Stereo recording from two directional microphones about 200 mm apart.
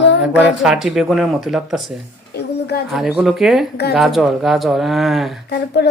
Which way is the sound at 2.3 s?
55° left (ahead or behind).